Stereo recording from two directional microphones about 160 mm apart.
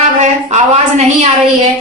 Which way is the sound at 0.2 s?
45° right (ahead or behind).